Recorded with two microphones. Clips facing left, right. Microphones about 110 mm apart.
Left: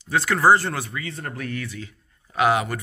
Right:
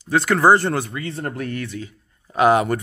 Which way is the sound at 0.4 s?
25° right (ahead or behind).